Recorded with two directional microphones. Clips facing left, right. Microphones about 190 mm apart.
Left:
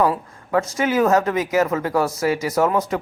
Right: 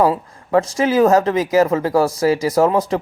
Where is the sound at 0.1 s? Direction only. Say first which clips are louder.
Right 4 dB; 30° right (ahead or behind).